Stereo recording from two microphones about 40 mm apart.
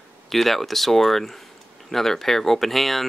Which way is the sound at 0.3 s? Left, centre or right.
Centre.